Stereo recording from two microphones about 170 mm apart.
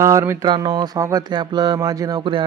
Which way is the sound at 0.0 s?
15° right (ahead or behind).